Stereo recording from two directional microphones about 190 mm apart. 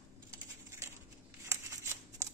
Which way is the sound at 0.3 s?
15° right (ahead or behind).